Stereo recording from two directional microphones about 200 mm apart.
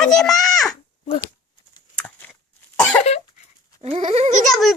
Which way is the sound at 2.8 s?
5° left (ahead or behind).